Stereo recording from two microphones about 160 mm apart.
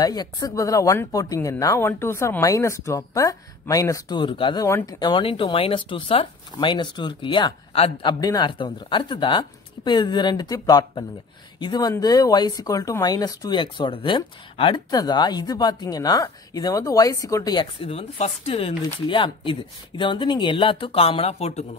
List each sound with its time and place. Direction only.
0.0 s speech: 25° left (ahead or behind)
4.6 s speech: 20° left (ahead or behind); by 21.6 s 40° left (ahead or behind)